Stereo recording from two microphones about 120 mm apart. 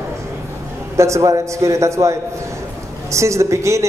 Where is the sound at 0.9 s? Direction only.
25° right (ahead or behind).